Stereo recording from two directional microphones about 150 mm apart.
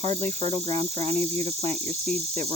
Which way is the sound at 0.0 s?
45° right (ahead or behind).